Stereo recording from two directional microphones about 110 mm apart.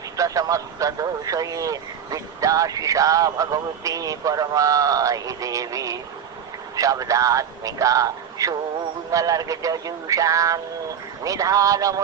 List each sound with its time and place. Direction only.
0.2 s speech: 30° right (ahead or behind)